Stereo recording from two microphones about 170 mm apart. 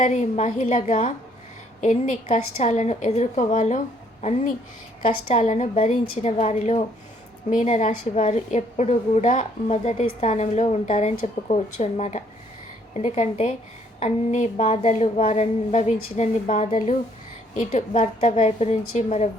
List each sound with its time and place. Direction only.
0.0 s a woman's voice: 40° left (ahead or behind)
5.0 s a woman's voice: 45° left (ahead or behind)